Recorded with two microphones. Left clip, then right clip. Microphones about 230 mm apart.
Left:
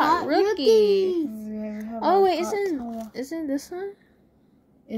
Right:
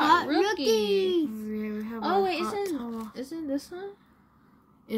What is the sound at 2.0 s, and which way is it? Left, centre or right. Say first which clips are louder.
A woman's voice: left 6 dB; left.